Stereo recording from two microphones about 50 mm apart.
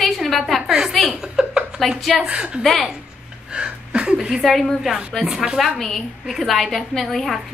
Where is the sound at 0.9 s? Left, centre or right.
Centre.